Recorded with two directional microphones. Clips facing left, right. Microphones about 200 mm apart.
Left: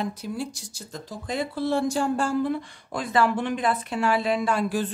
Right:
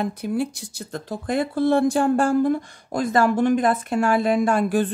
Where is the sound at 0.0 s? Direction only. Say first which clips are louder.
Right 6 dB; 55° right (ahead or behind).